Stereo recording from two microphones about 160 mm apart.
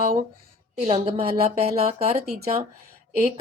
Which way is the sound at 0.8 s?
40° right (ahead or behind).